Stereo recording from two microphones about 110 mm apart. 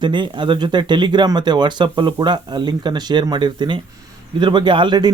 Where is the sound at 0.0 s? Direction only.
45° right (ahead or behind).